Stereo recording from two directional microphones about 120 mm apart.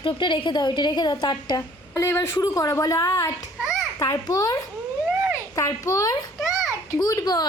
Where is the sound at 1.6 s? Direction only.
25° left (ahead or behind).